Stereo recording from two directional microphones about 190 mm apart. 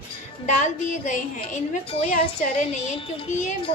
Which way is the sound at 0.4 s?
40° left (ahead or behind).